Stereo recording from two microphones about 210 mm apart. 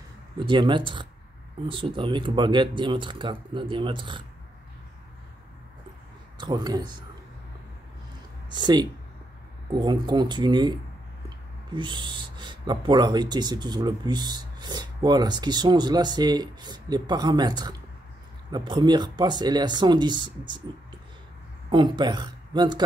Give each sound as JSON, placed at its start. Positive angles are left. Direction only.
{"t": 0.4, "sound": "speech", "side_deg": -20}
{"t": 6.3, "sound": "speech", "side_deg": -20}
{"t": 8.5, "sound": "speech", "side_deg": -20}
{"t": 21.6, "sound": "speech", "side_deg": -20}